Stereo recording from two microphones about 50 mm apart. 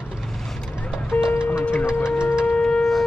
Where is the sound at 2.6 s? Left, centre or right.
Centre.